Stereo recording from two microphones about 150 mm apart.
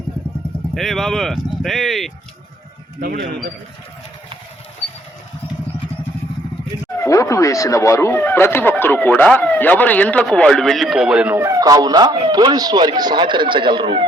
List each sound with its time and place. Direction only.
0.7 s speech: centre (ahead or behind)
3.0 s a man's voice: 75° right (ahead or behind)
7.0 s speech: 20° left (ahead or behind); by 11.3 s 5° right (ahead or behind)
11.3 s speech: 20° right (ahead or behind)